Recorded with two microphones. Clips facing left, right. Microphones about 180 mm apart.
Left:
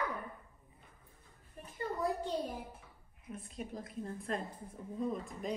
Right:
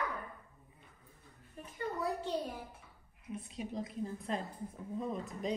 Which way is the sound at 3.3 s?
Centre (ahead or behind).